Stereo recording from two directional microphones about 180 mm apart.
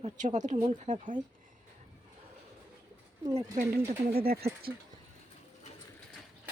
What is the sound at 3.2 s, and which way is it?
Speech, 15° right (ahead or behind).